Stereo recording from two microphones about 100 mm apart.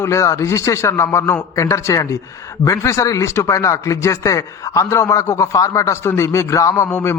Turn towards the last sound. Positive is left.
turn(degrees=25)  # may be behind; listen again after turning